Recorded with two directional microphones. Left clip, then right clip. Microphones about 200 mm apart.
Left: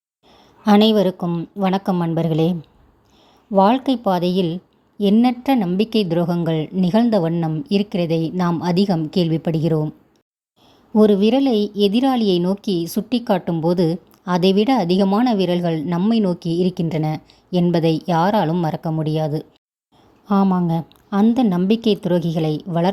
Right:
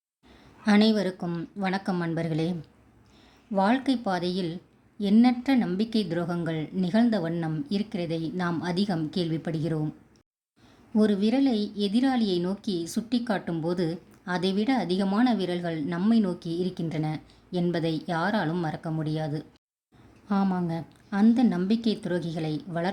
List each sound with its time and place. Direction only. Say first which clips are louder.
0.6 s a woman's voice: left 9 dB; 30° left (ahead or behind)
10.9 s a woman's voice: left 10 dB; 25° left (ahead or behind)